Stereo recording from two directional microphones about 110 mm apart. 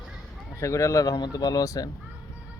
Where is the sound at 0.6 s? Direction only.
30° left (ahead or behind).